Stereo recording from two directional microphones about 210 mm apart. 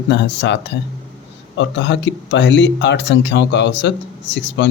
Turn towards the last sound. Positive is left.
turn(degrees=55)  # may be behind; listen again after turning